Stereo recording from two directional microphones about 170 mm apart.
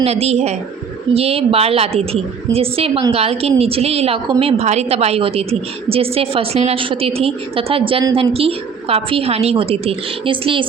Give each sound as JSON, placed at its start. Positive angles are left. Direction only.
{"t": 0.0, "sound": "a woman's voice", "side_deg": -35}